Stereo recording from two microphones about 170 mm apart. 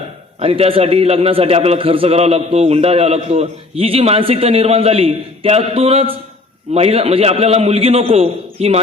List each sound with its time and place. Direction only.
0.3 s a man's voice: 35° right (ahead or behind)